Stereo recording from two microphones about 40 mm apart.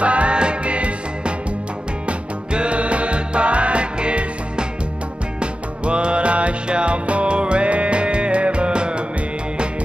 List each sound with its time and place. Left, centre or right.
0.0 s music: right